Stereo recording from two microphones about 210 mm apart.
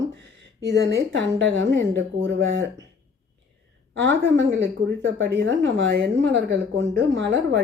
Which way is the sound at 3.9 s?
65° right (ahead or behind).